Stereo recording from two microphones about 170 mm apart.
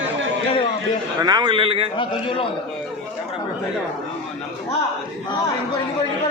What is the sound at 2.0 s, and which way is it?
Speech, 30° left (ahead or behind).